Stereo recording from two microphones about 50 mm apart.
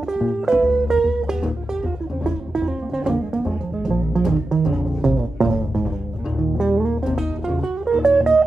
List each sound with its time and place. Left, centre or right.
0.1 s music: centre